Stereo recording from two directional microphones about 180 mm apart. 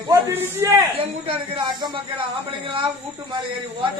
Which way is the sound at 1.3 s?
25° right (ahead or behind).